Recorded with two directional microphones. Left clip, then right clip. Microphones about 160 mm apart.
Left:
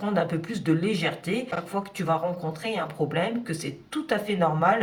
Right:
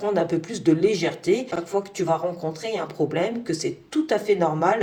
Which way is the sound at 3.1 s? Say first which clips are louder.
Right 3 dB; 35° right (ahead or behind).